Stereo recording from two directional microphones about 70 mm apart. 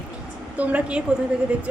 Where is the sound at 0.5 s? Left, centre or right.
Right.